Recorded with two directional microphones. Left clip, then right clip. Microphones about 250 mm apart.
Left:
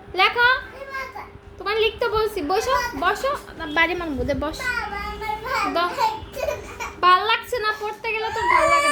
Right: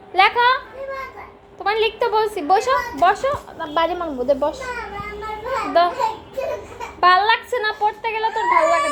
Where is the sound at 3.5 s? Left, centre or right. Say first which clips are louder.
Left 2 dB; left.